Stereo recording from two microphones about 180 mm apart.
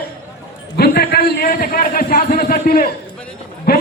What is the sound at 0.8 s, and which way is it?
A man's voice, 60° left (ahead or behind).